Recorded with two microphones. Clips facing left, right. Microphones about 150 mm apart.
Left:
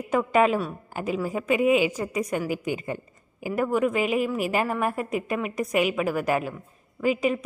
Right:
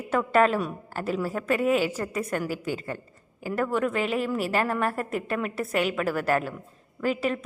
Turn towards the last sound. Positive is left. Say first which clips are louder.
# left 3 dB
turn(degrees=10)  # may be behind; listen again after turning